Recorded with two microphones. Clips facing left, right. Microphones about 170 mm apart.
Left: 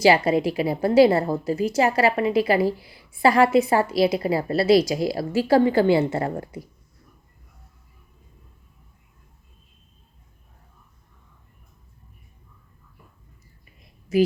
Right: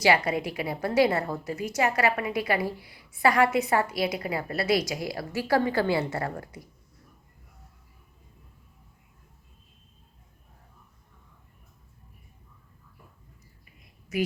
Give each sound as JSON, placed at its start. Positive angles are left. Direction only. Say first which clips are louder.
{"t": 0.0, "sound": "a woman's voice", "louder": "left 6 dB", "side_deg": 30}
{"t": 14.1, "sound": "a woman's voice", "louder": "left 9 dB", "side_deg": 30}